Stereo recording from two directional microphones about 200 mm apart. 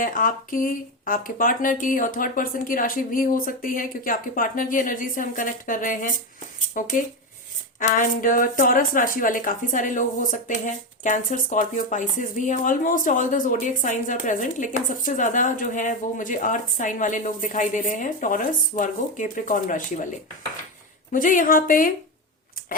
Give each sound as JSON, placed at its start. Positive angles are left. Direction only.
{"t": 0.0, "sound": "speech", "side_deg": 45}
{"t": 21.1, "sound": "speech", "side_deg": 40}